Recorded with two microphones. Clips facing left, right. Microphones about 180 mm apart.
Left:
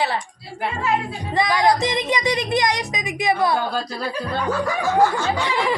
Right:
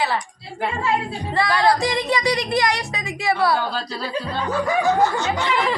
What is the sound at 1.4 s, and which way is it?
Speech, 15° left (ahead or behind).